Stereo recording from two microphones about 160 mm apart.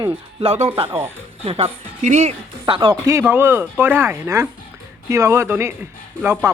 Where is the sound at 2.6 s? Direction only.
30° right (ahead or behind).